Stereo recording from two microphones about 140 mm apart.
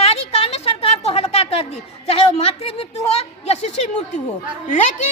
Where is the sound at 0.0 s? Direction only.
45° left (ahead or behind).